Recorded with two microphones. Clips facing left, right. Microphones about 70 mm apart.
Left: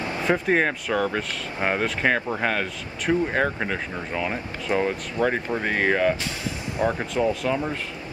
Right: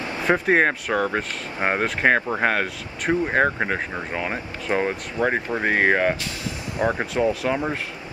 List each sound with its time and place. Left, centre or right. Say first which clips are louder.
0.3 s speech: right 3 dB; right
6.8 s speech: right 1 dB; centre
7.4 s speech: right 1 dB; right